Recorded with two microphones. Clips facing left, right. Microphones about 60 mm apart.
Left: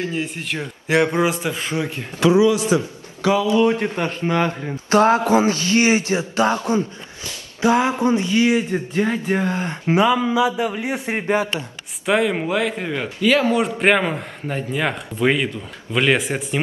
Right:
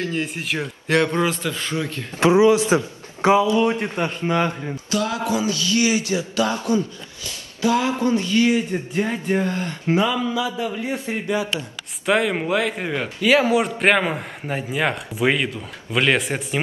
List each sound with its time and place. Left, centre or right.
0.1 s a man's voice: centre
2.4 s a man's voice: right
4.8 s a man's voice: left
11.1 s speech: left
12.1 s a man's voice: centre